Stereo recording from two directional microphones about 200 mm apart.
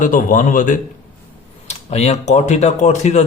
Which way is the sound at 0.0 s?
40° left (ahead or behind).